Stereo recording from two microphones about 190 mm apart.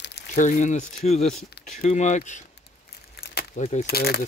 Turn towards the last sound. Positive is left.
turn(degrees=55)  # may be behind; listen again after turning